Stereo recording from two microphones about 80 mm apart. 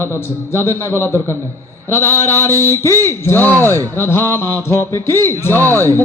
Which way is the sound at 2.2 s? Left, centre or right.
Left.